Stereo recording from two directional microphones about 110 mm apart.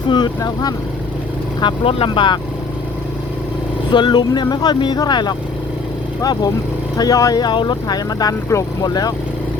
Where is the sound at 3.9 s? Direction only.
45° left (ahead or behind).